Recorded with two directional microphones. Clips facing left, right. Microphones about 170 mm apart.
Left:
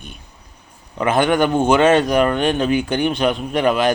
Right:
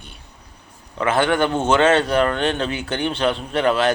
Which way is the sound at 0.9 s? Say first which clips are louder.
Left 2 dB; 15° left (ahead or behind).